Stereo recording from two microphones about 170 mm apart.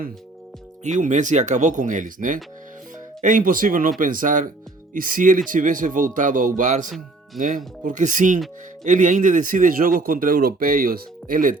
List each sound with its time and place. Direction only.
0.9 s a man's voice: 50° right (ahead or behind)